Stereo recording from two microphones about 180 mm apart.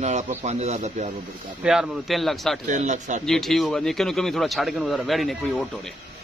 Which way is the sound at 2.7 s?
40° right (ahead or behind).